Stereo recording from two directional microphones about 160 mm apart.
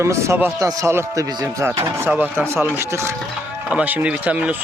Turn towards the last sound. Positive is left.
turn(degrees=-10)  # may be behind; listen again after turning